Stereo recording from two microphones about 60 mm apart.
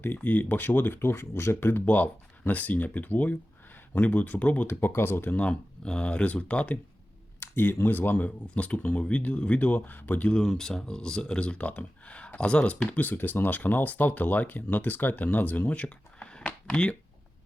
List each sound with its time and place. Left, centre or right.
0.2 s speech: left
2.5 s speech: left
4.6 s speech: left
5.4 s speech: centre
7.3 s speech: left
8.4 s speech: left
10.3 s speech: centre